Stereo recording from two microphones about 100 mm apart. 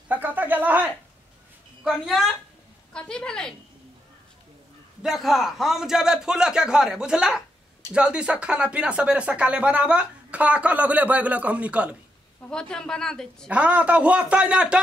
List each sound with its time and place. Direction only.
0.1 s a sound: 15° right (ahead or behind)
1.9 s a man's voice: centre (ahead or behind)
5.0 s a man's voice: 5° right (ahead or behind)
12.4 s a woman's voice: 10° left (ahead or behind)
13.5 s speech: 15° right (ahead or behind)